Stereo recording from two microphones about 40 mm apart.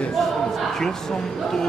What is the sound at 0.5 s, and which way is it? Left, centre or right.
Speech, centre.